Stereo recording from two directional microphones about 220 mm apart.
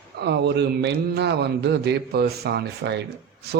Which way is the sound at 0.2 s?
50° right (ahead or behind).